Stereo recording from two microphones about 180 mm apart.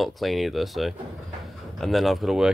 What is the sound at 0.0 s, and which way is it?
Speech, centre (ahead or behind).